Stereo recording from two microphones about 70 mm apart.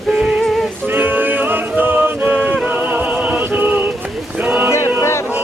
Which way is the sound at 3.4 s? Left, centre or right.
Right.